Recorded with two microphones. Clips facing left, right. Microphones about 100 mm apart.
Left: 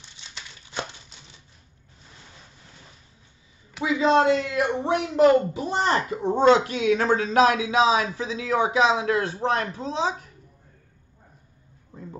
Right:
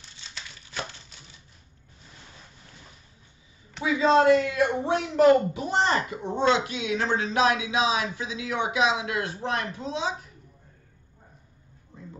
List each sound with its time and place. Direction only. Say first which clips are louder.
3.8 s speech: even; 25° left (ahead or behind)